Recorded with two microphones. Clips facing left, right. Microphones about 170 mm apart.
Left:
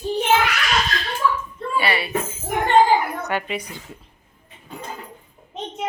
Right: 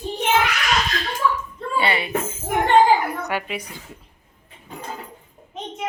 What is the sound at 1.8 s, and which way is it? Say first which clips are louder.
Speech: right 1 dB; 20° right (ahead or behind).